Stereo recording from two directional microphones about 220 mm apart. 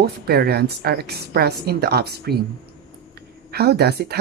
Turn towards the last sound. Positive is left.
turn(degrees=-45)  # may be behind; listen again after turning